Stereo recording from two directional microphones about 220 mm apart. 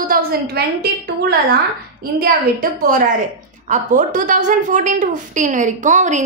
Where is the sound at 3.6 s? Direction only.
35° right (ahead or behind).